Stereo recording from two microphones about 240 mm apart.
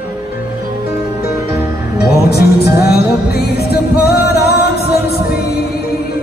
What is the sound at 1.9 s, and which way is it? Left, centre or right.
Music, left.